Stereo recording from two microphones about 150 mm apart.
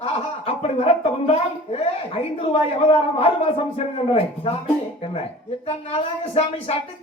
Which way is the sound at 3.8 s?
40° left (ahead or behind).